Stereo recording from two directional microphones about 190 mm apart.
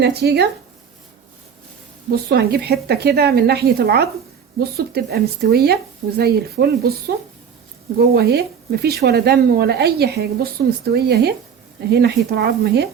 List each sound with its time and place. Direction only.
0.0 s speech: 60° right (ahead or behind)
2.3 s speech: 60° right (ahead or behind)
8.1 s speech: 55° right (ahead or behind)